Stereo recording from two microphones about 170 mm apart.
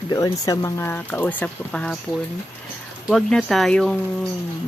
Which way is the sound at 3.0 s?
Centre (ahead or behind).